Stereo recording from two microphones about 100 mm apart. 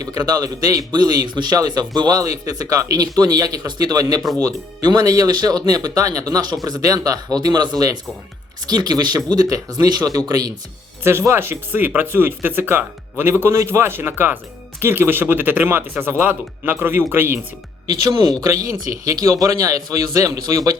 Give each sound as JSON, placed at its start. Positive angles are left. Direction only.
{"t": 0.0, "sound": "a man's voice", "side_deg": -40}
{"t": 11.0, "sound": "speech", "side_deg": -25}
{"t": 17.8, "sound": "a man's voice", "side_deg": -35}